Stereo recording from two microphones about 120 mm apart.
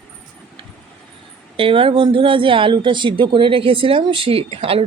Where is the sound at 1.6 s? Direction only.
45° right (ahead or behind).